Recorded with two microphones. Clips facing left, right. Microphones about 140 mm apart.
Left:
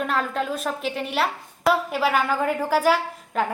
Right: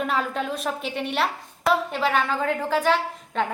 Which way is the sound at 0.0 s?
Centre (ahead or behind).